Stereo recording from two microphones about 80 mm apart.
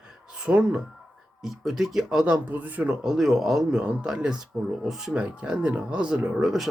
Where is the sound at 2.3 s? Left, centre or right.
Right.